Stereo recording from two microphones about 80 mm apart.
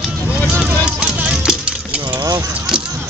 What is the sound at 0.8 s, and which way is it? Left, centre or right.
Vehicle, centre.